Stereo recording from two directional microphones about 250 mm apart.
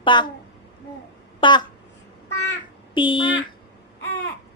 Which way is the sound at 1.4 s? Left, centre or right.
Centre.